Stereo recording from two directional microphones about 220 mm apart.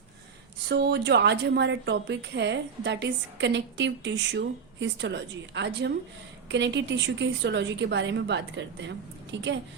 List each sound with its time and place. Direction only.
0.7 s a woman's voice: 50° right (ahead or behind)